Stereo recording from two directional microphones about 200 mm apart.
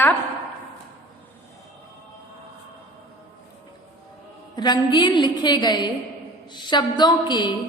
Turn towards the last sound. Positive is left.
turn(degrees=20)  # may be behind; listen again after turning